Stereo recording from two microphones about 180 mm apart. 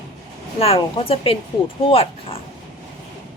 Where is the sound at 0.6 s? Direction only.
30° left (ahead or behind).